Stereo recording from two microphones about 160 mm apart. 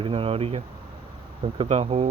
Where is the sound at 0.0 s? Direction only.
35° right (ahead or behind).